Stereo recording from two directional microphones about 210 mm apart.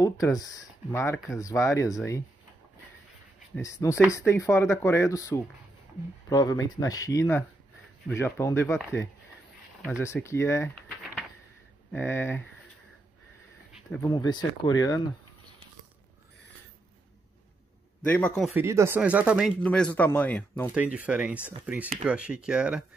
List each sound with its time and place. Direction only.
0.0 s speech: 15° left (ahead or behind)
3.5 s speech: 15° left (ahead or behind)
10.0 s speech: 15° left (ahead or behind)
11.9 s speech: 10° left (ahead or behind)
13.8 s speech: 10° left (ahead or behind)
14.1 s speech: 20° left (ahead or behind)
18.0 s speech: 5° left (ahead or behind)
18.5 s speech: 10° right (ahead or behind)
19.6 s speech: 5° left (ahead or behind)
20.7 s speech: 5° right (ahead or behind)